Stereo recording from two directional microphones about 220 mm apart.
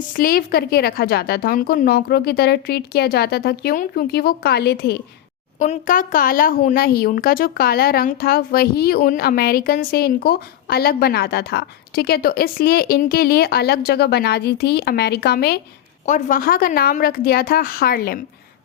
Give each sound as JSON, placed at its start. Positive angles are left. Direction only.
{"t": 0.1, "sound": "speech", "side_deg": 40}
{"t": 5.5, "sound": "speech", "side_deg": 35}
{"t": 16.0, "sound": "a woman's voice", "side_deg": 35}